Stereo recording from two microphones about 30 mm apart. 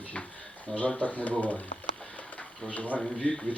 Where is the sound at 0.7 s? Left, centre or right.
Left.